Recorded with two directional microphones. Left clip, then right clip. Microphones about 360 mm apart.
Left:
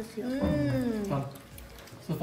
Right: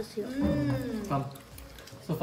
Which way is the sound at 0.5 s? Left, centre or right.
Centre.